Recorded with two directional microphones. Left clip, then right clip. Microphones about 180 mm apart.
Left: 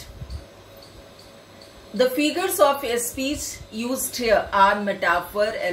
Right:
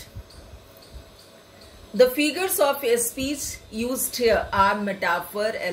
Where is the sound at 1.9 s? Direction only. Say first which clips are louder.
Right 2 dB; 40° right (ahead or behind).